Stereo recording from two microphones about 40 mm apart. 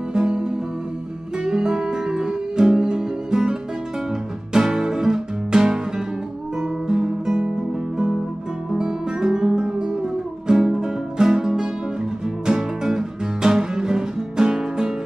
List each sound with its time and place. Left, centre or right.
0.1 s music: centre
4.6 s music: centre
8.7 s music: centre